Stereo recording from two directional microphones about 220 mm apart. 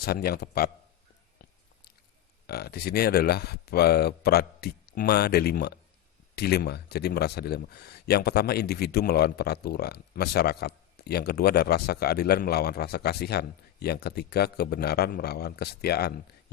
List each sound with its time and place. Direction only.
0.0 s speech: 45° left (ahead or behind)
2.5 s speech: 45° left (ahead or behind)